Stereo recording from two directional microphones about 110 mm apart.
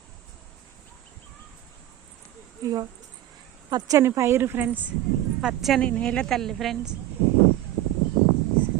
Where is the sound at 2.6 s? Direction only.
30° right (ahead or behind).